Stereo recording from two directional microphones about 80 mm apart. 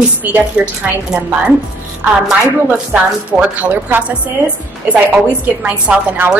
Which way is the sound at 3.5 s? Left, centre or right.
Centre.